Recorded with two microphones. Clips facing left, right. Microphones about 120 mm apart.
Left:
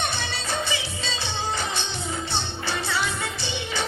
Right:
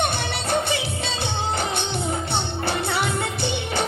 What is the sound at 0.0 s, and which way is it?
Music, 55° right (ahead or behind).